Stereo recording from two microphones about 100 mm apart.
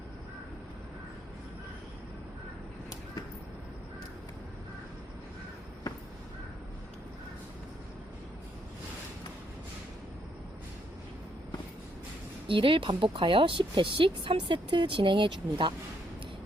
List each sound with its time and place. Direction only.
12.5 s a woman's voice: 60° right (ahead or behind)